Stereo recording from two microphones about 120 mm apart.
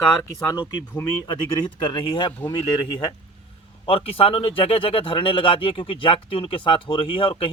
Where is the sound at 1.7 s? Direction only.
40° left (ahead or behind).